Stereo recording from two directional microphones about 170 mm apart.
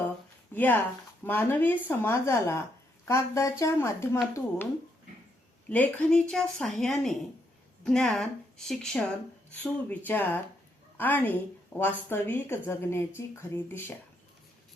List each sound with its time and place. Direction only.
0.5 s a woman's voice: 10° left (ahead or behind)